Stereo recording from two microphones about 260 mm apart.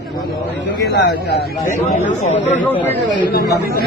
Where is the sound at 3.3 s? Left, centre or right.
Left.